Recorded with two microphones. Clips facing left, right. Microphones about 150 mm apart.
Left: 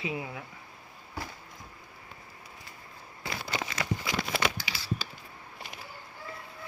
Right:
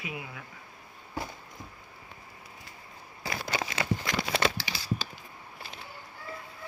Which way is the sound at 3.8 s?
35° right (ahead or behind).